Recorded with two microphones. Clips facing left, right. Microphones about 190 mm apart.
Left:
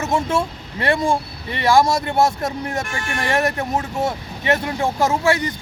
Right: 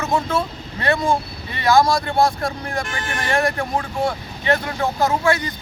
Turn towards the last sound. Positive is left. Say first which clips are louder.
# left 1 dB
turn(degrees=25)  # may be behind; listen again after turning